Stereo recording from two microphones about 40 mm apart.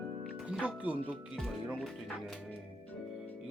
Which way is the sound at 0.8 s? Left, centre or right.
Right.